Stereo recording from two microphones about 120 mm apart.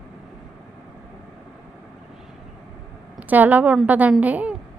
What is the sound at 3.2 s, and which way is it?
A woman's voice, 15° right (ahead or behind).